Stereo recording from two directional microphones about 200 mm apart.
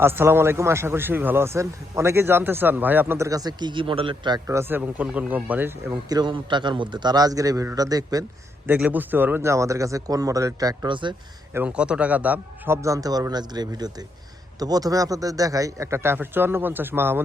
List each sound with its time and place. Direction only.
0.0 s a man's voice: 10° right (ahead or behind)
11.5 s a man's voice: 5° right (ahead or behind)